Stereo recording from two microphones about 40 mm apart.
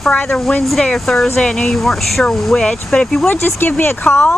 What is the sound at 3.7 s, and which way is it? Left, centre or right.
Speech, left.